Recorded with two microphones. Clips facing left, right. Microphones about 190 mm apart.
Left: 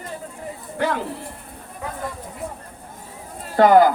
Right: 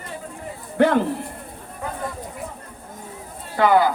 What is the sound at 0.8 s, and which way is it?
Speech, 55° right (ahead or behind).